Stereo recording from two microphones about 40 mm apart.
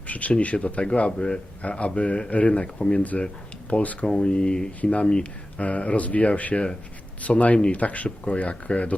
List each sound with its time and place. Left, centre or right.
0.1 s speech: left
4.0 s speech: left